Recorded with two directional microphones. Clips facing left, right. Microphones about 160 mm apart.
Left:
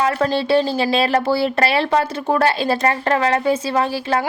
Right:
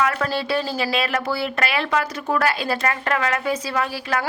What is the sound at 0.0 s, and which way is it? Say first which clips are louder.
Speech: left 4 dB; 30° left (ahead or behind).